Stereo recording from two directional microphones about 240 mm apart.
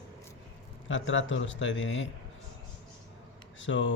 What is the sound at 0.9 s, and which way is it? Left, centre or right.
Speech, left.